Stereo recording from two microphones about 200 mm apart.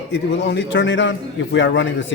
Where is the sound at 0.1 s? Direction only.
60° left (ahead or behind).